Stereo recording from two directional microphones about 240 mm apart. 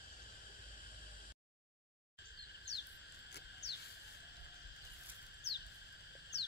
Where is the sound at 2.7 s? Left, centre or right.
Left.